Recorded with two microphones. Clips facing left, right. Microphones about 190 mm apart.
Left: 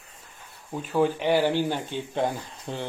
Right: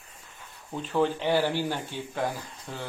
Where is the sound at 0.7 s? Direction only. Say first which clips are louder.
Left 2 dB; 10° left (ahead or behind).